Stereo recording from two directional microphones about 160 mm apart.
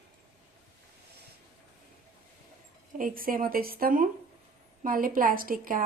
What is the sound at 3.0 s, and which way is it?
A woman's voice, 60° right (ahead or behind).